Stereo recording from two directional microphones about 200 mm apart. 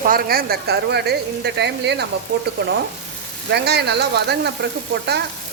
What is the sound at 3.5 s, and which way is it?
Speech, 55° right (ahead or behind).